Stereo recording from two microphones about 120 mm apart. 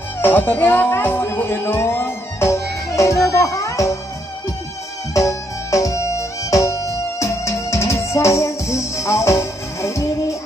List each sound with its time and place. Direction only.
0.2 s speech: 15° left (ahead or behind)
5.1 s music: 25° left (ahead or behind)